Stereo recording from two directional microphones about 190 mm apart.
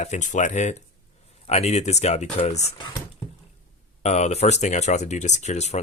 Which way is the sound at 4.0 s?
35° left (ahead or behind).